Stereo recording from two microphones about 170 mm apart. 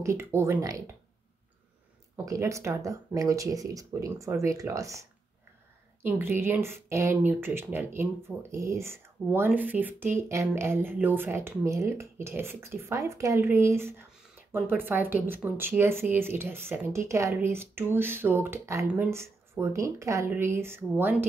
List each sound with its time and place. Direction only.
0.0 s speech: 15° right (ahead or behind)
2.2 s speech: 20° right (ahead or behind)
6.0 s speech: 10° right (ahead or behind)